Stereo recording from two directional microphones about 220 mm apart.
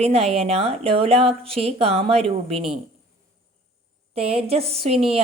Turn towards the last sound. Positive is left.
turn(degrees=-25)  # may be behind; listen again after turning